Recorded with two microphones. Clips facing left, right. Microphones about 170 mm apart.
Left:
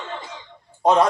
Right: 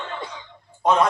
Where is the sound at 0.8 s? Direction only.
30° left (ahead or behind).